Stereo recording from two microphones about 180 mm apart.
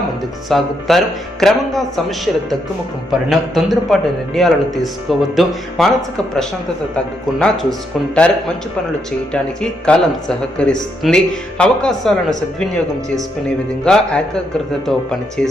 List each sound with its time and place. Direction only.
0.5 s speech: centre (ahead or behind)
9.3 s speech: 5° left (ahead or behind)